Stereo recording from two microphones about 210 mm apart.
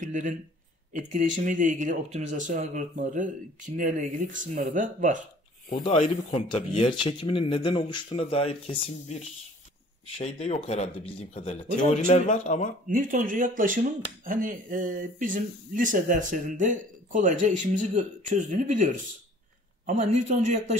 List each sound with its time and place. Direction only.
0.0 s speech: 35° right (ahead or behind)
5.7 s speech: 30° left (ahead or behind)
12.8 s speech: 40° right (ahead or behind)
20.0 s speech: 35° right (ahead or behind)